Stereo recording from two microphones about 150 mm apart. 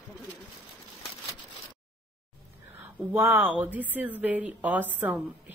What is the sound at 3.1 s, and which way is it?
Speech, 10° right (ahead or behind).